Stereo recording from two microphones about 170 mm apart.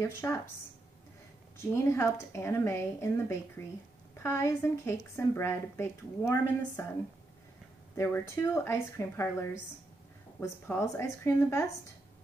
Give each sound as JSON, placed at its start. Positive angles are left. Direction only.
{"t": 0.0, "sound": "a woman's voice", "side_deg": 15}
{"t": 1.6, "sound": "a woman's voice", "side_deg": 15}
{"t": 7.9, "sound": "a woman's voice", "side_deg": 15}